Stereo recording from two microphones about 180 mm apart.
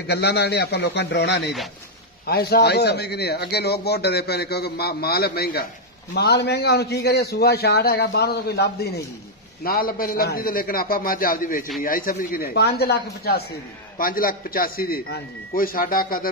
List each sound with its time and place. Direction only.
0.0 s a man's voice: 65° left (ahead or behind)
2.2 s a man's voice: 60° left (ahead or behind)
9.6 s a man's voice: 55° left (ahead or behind)